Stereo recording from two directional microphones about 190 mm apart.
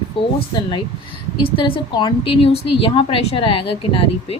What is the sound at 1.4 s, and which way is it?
A woman's voice, 25° left (ahead or behind).